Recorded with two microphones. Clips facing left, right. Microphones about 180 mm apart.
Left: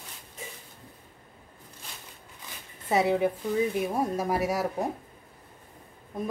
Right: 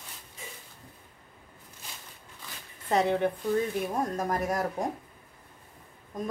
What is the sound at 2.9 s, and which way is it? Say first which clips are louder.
Speech: left 1 dB; 5° left (ahead or behind).